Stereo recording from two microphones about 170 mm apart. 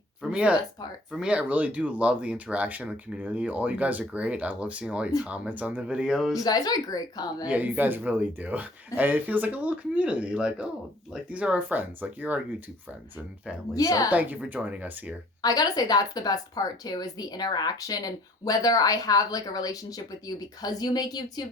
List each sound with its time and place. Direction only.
0.2 s speech: 5° right (ahead or behind)
6.4 s a woman's voice: 20° left (ahead or behind)
7.4 s speech: 10° right (ahead or behind)
13.7 s a woman's voice: 20° left (ahead or behind)
14.1 s speech: 10° right (ahead or behind)
15.4 s a woman's voice: 20° left (ahead or behind)